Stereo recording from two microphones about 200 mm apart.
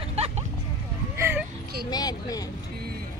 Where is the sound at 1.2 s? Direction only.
10° right (ahead or behind).